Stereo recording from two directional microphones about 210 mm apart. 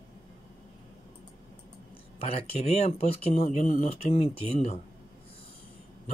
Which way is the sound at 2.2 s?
25° left (ahead or behind).